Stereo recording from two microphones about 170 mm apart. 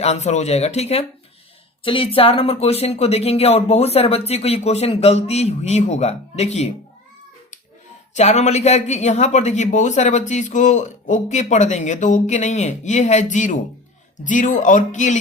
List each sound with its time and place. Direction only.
0.0 s speech: 40° left (ahead or behind)
8.1 s speech: 40° left (ahead or behind)